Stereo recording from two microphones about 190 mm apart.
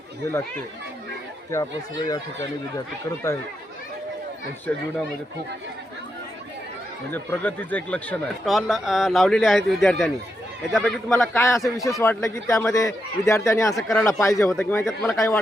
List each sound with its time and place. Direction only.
2.0 s speech: 20° left (ahead or behind)
7.1 s speech: 10° left (ahead or behind)
11.1 s a man's voice: 10° left (ahead or behind)
13.7 s speech: centre (ahead or behind)
14.0 s a man's voice: 15° left (ahead or behind)
14.8 s speech: centre (ahead or behind)